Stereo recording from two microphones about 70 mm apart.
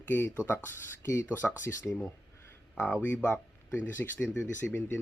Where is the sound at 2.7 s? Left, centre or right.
Left.